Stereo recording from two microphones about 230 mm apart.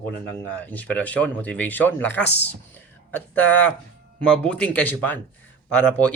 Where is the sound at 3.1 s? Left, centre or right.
Centre.